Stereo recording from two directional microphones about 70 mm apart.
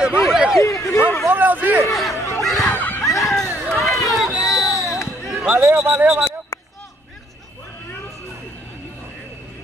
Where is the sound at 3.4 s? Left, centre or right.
Left.